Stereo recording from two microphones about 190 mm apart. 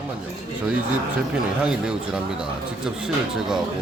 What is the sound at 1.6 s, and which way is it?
Speech, 5° right (ahead or behind).